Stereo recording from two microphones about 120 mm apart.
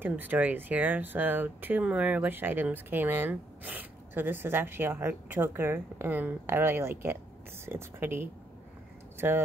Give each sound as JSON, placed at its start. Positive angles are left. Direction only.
{"t": 0.0, "sound": "a woman's voice", "side_deg": -15}